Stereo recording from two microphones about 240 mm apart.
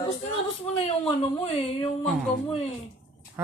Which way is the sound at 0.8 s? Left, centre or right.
Left.